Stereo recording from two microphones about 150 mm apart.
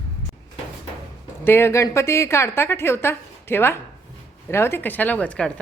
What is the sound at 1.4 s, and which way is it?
A woman's voice, 15° left (ahead or behind).